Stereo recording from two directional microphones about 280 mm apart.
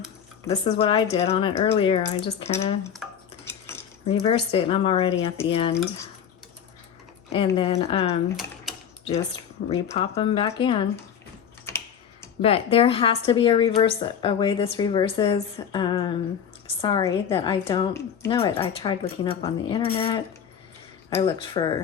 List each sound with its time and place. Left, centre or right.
0.4 s a woman's voice: left
4.0 s a woman's voice: centre
7.3 s a woman's voice: centre
8.7 s a sound: centre
9.6 s a woman's voice: left
11.7 s typing: centre
12.4 s a woman's voice: left